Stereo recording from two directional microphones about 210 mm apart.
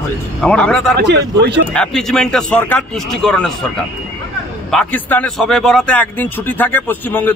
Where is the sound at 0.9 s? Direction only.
55° right (ahead or behind).